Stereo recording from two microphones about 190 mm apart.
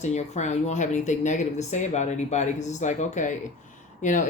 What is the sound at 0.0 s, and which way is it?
Speech, 35° left (ahead or behind).